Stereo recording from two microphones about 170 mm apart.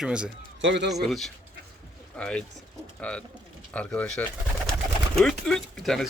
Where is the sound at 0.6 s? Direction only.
90° right.